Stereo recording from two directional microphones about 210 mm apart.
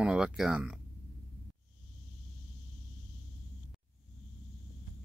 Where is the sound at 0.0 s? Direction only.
5° right (ahead or behind).